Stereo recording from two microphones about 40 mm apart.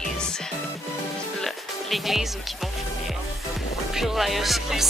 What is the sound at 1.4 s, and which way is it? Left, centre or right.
Music, centre.